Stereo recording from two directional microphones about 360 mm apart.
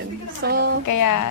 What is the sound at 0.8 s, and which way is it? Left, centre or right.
Speech, left.